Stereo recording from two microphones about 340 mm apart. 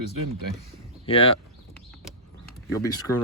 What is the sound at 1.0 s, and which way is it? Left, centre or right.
Speech, centre.